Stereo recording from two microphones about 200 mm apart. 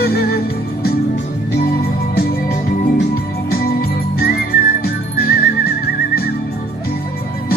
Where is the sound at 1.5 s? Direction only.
50° left (ahead or behind).